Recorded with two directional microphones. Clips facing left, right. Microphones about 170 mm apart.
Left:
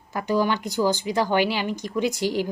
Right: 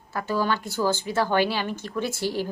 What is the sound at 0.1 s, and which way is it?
A woman's voice, 15° left (ahead or behind).